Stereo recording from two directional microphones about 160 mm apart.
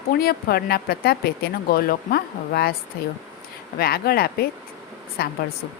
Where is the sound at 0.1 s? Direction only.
70° left (ahead or behind).